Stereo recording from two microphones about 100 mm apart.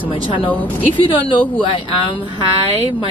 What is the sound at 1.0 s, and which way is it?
Speech, 60° left (ahead or behind).